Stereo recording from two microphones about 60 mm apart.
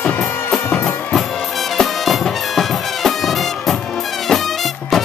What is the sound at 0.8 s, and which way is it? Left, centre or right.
Music, centre.